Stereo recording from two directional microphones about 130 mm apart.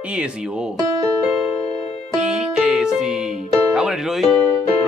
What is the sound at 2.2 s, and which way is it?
Music, 5° right (ahead or behind).